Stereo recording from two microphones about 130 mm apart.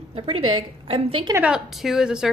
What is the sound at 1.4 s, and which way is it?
Speech, 5° right (ahead or behind).